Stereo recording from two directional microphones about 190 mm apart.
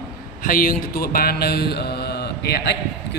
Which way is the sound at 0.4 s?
50° left (ahead or behind).